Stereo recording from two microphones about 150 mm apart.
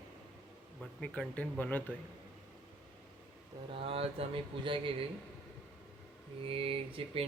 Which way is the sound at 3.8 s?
40° right (ahead or behind).